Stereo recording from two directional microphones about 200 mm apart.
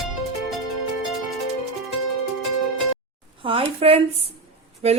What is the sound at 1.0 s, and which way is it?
Music, centre (ahead or behind).